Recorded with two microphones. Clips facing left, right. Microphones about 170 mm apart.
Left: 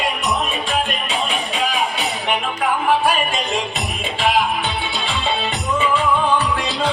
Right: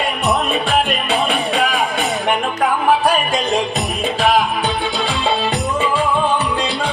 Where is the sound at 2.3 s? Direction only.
40° right (ahead or behind).